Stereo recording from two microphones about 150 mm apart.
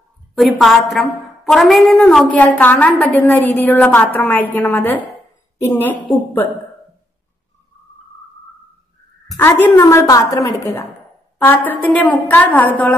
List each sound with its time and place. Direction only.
0.3 s a woman's voice: centre (ahead or behind)
9.3 s a woman's voice: centre (ahead or behind)
9.8 s a woman's voice: 20° left (ahead or behind)